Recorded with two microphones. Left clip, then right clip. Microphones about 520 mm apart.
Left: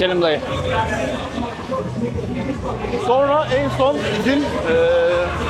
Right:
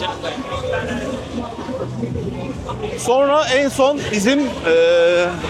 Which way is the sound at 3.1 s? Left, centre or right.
Right.